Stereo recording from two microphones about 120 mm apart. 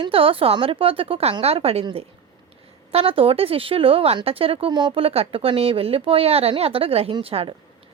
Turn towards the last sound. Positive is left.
turn(degrees=-50)  # may be behind; listen again after turning